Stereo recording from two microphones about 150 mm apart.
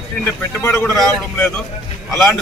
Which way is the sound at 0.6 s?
15° left (ahead or behind).